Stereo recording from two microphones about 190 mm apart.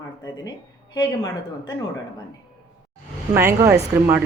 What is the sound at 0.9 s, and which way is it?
Speech, 20° left (ahead or behind).